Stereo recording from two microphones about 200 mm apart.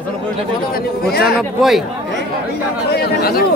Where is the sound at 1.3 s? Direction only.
Centre (ahead or behind).